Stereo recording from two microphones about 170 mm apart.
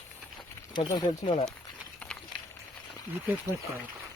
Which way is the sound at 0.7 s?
25° left (ahead or behind).